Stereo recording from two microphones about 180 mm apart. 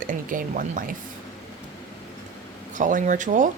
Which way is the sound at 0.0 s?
50° right (ahead or behind).